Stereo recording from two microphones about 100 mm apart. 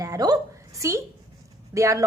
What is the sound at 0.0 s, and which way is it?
A woman's voice, 35° right (ahead or behind).